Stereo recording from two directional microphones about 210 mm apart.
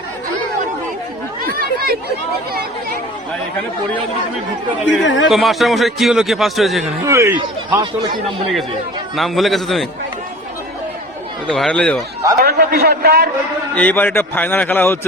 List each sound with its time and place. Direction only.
1.4 s chatter: 45° right (ahead or behind)
5.0 s a man's voice: 60° left (ahead or behind)
5.3 s a man's voice: centre (ahead or behind)
7.0 s speech: 15° right (ahead or behind)
9.1 s a man's voice: centre (ahead or behind)
11.4 s a man's voice: 5° left (ahead or behind)
12.4 s a man's voice: 45° right (ahead or behind)
13.7 s a man's voice: 10° left (ahead or behind)